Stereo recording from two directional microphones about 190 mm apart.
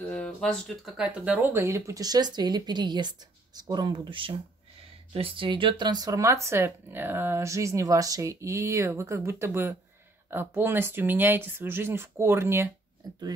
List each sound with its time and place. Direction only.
0.0 s speech: 5° left (ahead or behind); by 12.6 s 15° right (ahead or behind)